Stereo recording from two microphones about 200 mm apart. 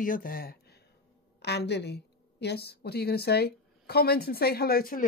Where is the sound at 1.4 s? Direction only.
55° left (ahead or behind).